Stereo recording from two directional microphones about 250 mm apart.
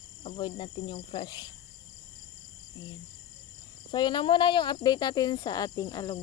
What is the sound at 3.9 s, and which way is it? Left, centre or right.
Speech, centre.